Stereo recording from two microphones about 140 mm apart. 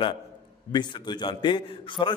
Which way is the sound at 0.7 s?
30° left (ahead or behind).